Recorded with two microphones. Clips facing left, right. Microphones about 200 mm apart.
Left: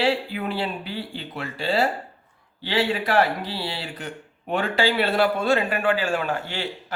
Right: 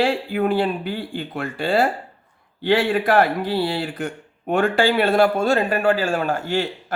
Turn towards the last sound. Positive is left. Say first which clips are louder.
# right 5 dB
turn(degrees=-45)  # may be behind; listen again after turning